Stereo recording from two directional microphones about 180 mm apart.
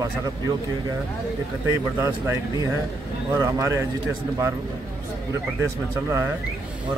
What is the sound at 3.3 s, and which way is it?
Speech, 15° right (ahead or behind).